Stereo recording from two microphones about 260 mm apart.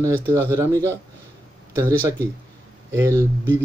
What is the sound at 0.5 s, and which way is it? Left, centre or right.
Speech, centre.